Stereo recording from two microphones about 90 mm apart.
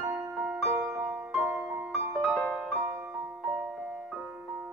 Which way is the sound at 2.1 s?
Centre (ahead or behind).